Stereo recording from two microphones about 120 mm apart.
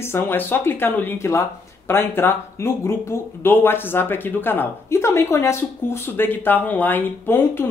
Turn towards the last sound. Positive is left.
turn(degrees=20)  # may be behind; listen again after turning